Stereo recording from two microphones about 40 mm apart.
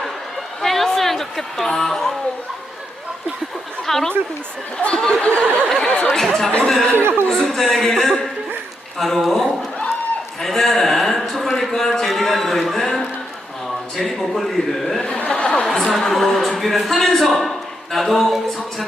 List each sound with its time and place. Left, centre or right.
0.6 s a sound: centre
0.9 s a woman's voice: centre
3.8 s speech: centre
4.8 s speech: left
5.6 s a man's voice: centre
6.9 s speech: right
7.3 s a man's voice: centre
15.3 s speech: left
15.6 s a man's voice: centre